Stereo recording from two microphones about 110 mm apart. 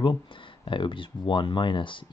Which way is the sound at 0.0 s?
50° left (ahead or behind).